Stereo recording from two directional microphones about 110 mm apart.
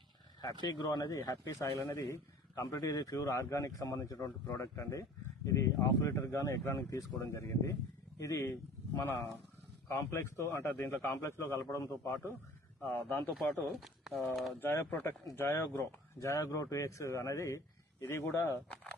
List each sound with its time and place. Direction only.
0.6 s a man's voice: 35° left (ahead or behind); by 13.3 s 20° left (ahead or behind)
13.7 s speech: centre (ahead or behind)
14.6 s a man's voice: 20° left (ahead or behind)